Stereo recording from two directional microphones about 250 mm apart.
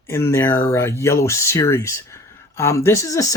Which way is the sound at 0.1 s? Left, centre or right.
Centre.